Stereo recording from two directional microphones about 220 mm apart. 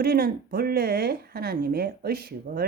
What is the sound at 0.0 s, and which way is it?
A woman's voice, 45° right (ahead or behind).